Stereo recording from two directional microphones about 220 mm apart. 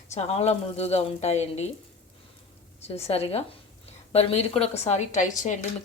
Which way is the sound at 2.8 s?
30° left (ahead or behind).